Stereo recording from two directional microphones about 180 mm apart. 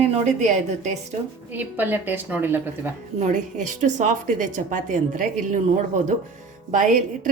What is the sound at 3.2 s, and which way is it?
A woman's voice, 45° right (ahead or behind).